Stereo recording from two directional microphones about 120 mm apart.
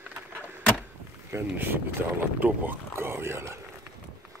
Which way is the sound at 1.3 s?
15° right (ahead or behind).